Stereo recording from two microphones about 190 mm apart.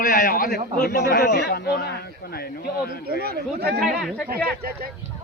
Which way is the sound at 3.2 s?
55° right (ahead or behind).